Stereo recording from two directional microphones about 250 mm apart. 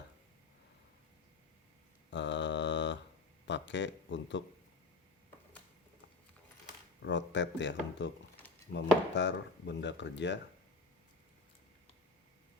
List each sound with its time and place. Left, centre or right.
2.0 s mantra: left
3.4 s speech: left
7.0 s speech: left